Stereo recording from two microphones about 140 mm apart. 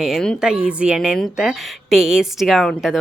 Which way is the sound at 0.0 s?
Centre (ahead or behind).